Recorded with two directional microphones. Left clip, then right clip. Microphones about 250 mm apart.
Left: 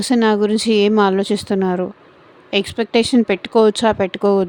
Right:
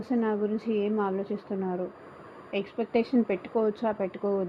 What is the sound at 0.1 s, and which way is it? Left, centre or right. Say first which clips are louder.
Speech: left 13 dB; left.